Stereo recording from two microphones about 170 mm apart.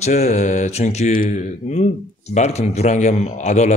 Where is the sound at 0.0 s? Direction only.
40° left (ahead or behind).